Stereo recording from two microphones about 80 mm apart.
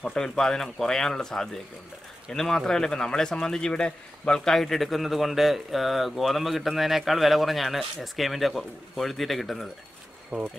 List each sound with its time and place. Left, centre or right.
0.0 s speech: centre